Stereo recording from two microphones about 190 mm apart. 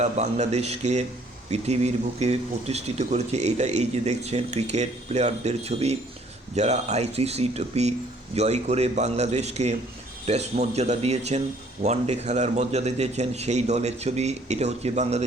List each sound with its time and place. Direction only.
0.0 s speech: 35° right (ahead or behind)